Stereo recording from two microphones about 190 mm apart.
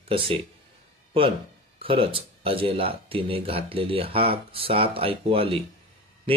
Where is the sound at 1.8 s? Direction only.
30° right (ahead or behind).